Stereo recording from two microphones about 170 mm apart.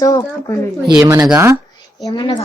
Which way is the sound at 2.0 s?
25° left (ahead or behind).